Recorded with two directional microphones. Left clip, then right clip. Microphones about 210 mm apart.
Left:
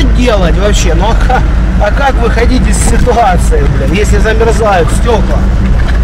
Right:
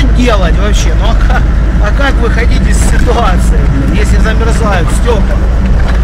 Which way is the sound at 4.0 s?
15° left (ahead or behind).